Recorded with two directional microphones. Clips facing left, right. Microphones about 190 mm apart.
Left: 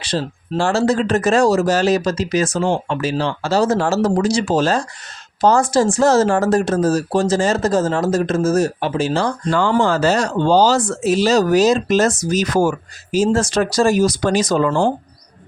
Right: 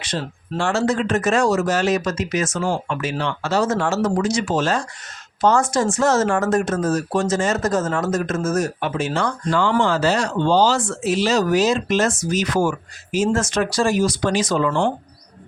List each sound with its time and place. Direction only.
0.0 s speech: 35° left (ahead or behind)
9.5 s speech: 45° left (ahead or behind)